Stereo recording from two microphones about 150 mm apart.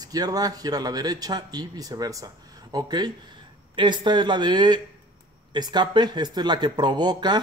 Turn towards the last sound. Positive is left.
turn(degrees=-30)  # may be behind; listen again after turning